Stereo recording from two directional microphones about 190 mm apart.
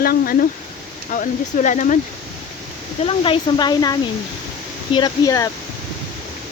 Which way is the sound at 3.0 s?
25° left (ahead or behind).